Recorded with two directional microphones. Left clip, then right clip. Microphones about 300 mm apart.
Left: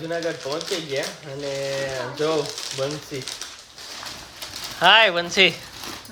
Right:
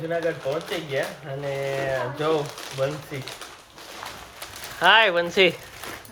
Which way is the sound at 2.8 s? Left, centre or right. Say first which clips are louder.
Right 1 dB; centre.